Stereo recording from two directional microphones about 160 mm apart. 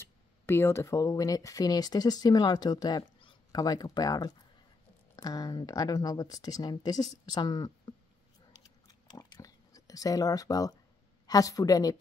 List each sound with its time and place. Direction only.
0.5 s speech: 15° left (ahead or behind)
8.8 s a sound: 25° left (ahead or behind)
11.2 s speech: 20° left (ahead or behind)